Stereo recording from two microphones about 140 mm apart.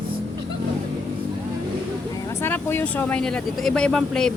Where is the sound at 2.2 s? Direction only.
15° left (ahead or behind).